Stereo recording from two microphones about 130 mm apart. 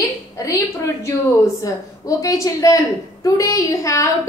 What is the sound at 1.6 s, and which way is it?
A woman's voice, 25° left (ahead or behind).